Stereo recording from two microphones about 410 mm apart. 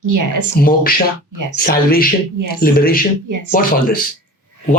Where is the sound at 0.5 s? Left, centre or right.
Left.